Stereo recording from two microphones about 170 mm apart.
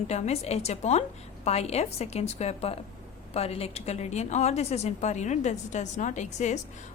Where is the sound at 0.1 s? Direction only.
40° left (ahead or behind).